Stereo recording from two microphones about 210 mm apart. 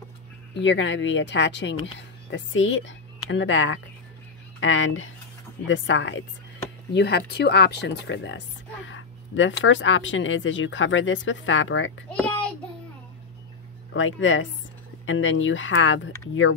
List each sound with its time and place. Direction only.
0.6 s a woman's voice: 60° left (ahead or behind)
12.1 s child singing: 5° left (ahead or behind)
13.9 s a woman's voice: 65° left (ahead or behind)